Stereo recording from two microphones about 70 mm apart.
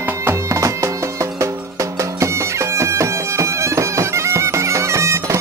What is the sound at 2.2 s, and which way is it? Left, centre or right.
Bagpipes, right.